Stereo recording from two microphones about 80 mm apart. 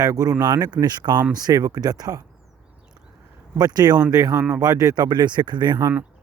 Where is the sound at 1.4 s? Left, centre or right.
Right.